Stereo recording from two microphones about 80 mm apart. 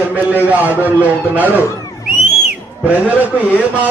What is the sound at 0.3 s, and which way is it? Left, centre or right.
A man's voice, centre.